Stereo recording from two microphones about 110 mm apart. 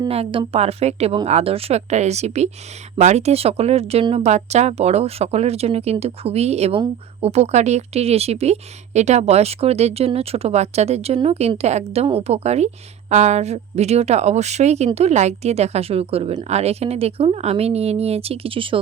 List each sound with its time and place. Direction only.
0.1 s a woman's voice: 60° right (ahead or behind)
4.1 s a woman's voice: 85° right; by 18.8 s 55° right (ahead or behind)